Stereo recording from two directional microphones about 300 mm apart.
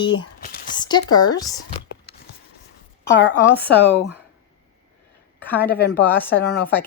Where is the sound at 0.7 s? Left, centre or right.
Centre.